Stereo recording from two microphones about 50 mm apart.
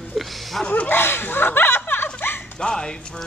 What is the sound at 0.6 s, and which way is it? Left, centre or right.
Speech, left.